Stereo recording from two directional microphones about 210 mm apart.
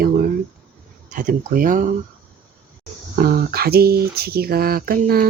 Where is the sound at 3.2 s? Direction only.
45° right (ahead or behind).